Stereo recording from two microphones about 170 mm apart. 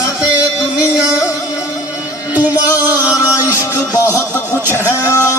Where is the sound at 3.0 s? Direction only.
10° right (ahead or behind).